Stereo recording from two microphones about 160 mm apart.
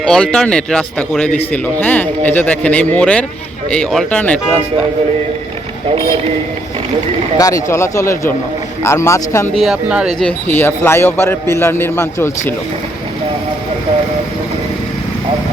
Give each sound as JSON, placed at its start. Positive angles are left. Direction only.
{"t": 0.0, "sound": "a man's voice", "side_deg": 5}
{"t": 7.3, "sound": "a man's voice", "side_deg": 20}
{"t": 9.6, "sound": "speech", "side_deg": -5}
{"t": 10.2, "sound": "a man's voice", "side_deg": 10}